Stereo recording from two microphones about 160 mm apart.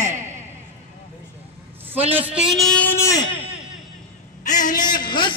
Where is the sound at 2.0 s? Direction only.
35° right (ahead or behind).